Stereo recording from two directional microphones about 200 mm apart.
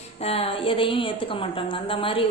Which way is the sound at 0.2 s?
30° left (ahead or behind).